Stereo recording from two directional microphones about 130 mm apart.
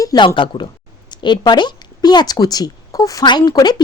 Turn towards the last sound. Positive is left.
turn(degrees=30)  # may be behind; listen again after turning